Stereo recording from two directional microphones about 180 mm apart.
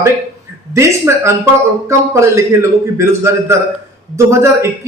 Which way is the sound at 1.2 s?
15° right (ahead or behind).